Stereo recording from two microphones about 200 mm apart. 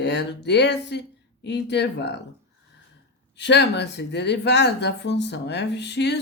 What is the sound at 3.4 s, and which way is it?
Speech, 60° left (ahead or behind).